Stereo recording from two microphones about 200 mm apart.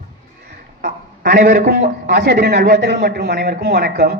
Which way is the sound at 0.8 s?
45° right (ahead or behind).